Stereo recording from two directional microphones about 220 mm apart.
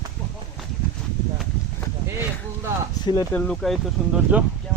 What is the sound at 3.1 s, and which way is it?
Speech, 15° left (ahead or behind).